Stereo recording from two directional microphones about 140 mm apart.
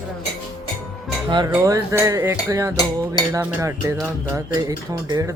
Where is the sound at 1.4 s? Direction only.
20° right (ahead or behind).